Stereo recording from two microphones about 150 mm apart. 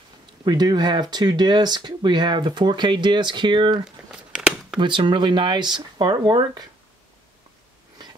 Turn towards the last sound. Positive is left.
turn(degrees=-30)  # may be behind; listen again after turning